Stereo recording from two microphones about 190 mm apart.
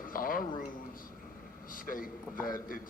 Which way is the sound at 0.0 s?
50° left (ahead or behind).